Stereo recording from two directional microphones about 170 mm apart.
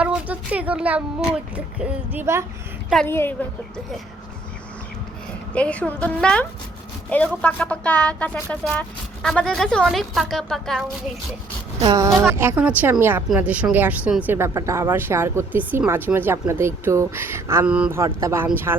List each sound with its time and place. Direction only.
0.0 s a woman's voice: 10° right (ahead or behind)
3.1 s speech: 15° left (ahead or behind)
5.5 s a woman's voice: 5° left (ahead or behind)
11.8 s a woman's voice: 25° right (ahead or behind)